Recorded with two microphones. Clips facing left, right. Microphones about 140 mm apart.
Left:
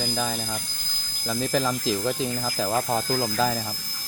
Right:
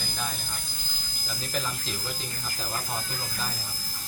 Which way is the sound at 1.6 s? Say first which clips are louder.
Left 9 dB; 90° left.